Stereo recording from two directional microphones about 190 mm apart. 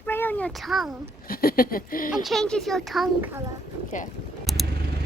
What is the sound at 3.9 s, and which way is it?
Speech, 40° left (ahead or behind).